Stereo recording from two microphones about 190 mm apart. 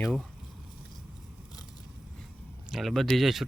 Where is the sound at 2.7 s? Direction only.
Centre (ahead or behind).